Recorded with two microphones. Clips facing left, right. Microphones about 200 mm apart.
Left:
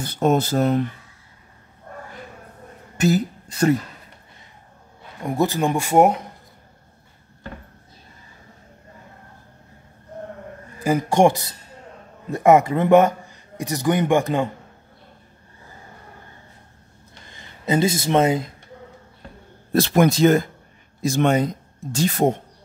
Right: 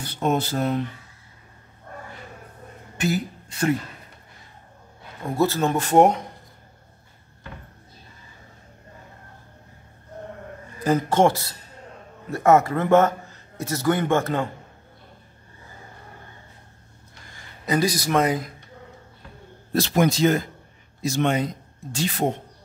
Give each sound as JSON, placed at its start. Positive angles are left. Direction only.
{"t": 0.0, "sound": "speech", "side_deg": 45}
{"t": 3.0, "sound": "speech", "side_deg": 40}
{"t": 5.2, "sound": "a man's voice", "side_deg": 15}
{"t": 10.8, "sound": "a man's voice", "side_deg": 10}
{"t": 17.6, "sound": "speech", "side_deg": 25}
{"t": 19.7, "sound": "speech", "side_deg": 55}